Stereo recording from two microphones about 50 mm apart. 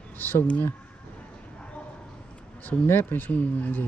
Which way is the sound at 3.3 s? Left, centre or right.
Left.